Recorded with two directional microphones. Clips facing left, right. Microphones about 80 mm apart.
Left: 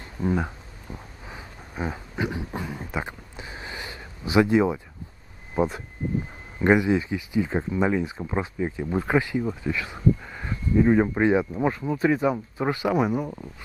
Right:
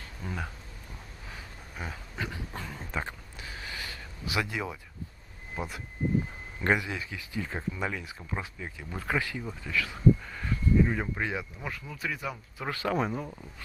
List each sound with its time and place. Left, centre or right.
0.0 s a sound: left
5.6 s speech: left
12.7 s speech: centre